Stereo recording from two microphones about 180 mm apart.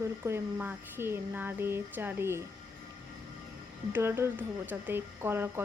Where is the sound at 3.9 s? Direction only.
15° right (ahead or behind).